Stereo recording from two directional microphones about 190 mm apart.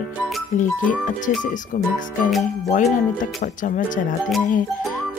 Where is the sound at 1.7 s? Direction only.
45° left (ahead or behind).